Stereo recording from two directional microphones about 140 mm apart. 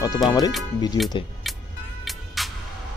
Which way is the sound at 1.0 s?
25° left (ahead or behind).